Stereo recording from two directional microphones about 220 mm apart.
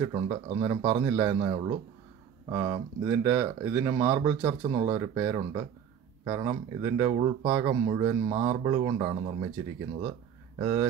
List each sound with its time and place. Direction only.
0.0 s speech: 20° right (ahead or behind)
10.6 s speech: 10° right (ahead or behind)